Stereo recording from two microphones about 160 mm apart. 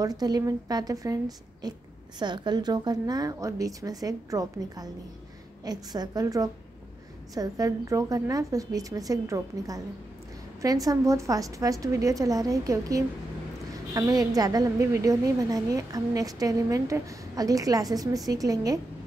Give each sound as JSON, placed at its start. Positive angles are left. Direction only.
{"t": 0.0, "sound": "a woman's voice", "side_deg": -25}